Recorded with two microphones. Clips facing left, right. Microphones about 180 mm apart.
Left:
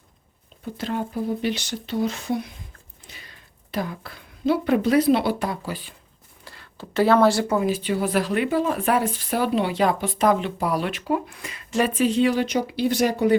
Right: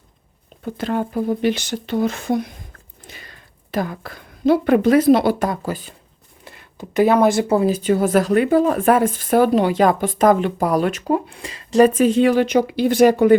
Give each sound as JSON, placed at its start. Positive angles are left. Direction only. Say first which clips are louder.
{"t": 0.6, "sound": "speech", "louder": "right 5 dB", "side_deg": -55}
{"t": 3.7, "sound": "speech", "louder": "right 5 dB", "side_deg": -50}
{"t": 6.4, "sound": "speech", "louder": "right 4 dB", "side_deg": -20}
{"t": 11.3, "sound": "speech", "louder": "right 6 dB", "side_deg": -30}